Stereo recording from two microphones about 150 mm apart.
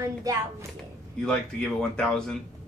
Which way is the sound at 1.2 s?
5° left (ahead or behind).